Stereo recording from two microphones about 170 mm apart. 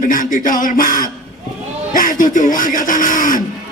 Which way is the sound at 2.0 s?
55° left (ahead or behind).